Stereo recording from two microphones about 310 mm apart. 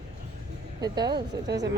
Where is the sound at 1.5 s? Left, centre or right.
Right.